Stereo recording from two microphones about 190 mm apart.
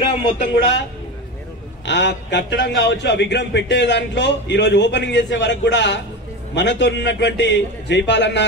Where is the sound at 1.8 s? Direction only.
65° left (ahead or behind).